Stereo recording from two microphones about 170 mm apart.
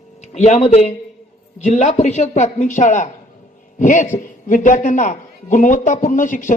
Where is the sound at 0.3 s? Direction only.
40° left (ahead or behind).